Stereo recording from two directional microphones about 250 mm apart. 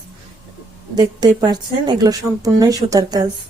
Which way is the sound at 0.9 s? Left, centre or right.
Centre.